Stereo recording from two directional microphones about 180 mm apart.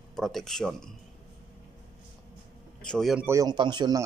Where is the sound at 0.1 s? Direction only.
Centre (ahead or behind).